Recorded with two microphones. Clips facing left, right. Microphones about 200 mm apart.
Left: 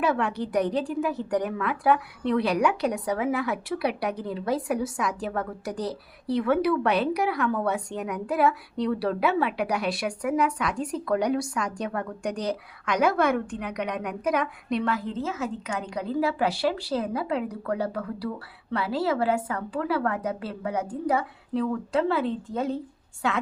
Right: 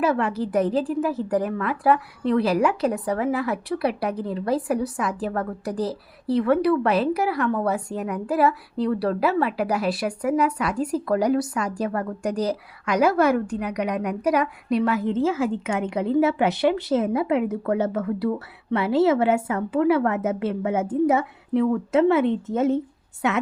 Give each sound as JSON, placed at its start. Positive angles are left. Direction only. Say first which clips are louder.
{"t": 0.0, "sound": "a woman's voice", "louder": "right 3 dB", "side_deg": 0}